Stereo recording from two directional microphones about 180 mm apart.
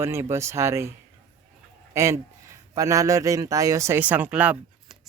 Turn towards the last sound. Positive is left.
turn(degrees=-10)  # may be behind; listen again after turning